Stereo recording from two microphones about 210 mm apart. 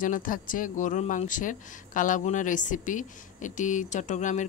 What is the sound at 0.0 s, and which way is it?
Speech, 40° left (ahead or behind).